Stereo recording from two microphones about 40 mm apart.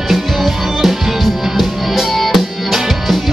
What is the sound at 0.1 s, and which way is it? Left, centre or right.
Music, centre.